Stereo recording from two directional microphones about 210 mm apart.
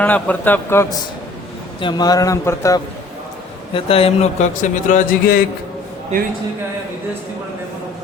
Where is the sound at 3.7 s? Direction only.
25° left (ahead or behind).